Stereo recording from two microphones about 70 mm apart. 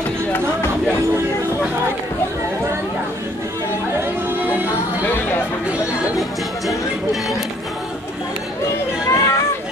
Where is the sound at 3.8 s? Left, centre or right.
Right.